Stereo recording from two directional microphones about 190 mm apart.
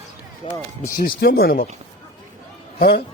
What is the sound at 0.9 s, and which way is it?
Speech, 50° left (ahead or behind).